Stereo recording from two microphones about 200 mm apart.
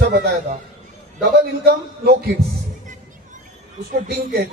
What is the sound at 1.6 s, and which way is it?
Speech, 50° right (ahead or behind).